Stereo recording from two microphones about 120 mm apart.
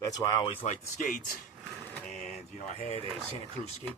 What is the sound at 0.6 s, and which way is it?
Speech, 80° left.